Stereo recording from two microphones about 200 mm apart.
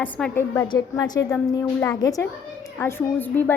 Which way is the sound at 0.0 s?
10° left (ahead or behind).